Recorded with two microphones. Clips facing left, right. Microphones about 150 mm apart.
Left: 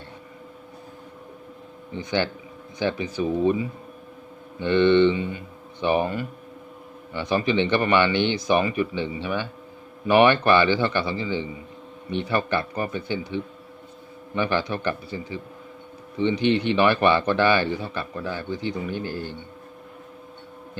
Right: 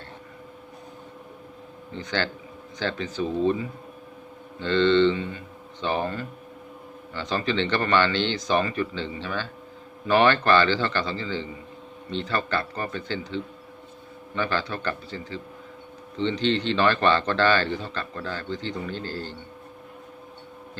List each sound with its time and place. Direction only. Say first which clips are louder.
1.9 s speech: left 3 dB; 15° left (ahead or behind)